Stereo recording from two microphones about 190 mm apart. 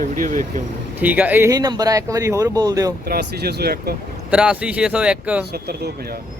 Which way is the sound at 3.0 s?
55° right (ahead or behind).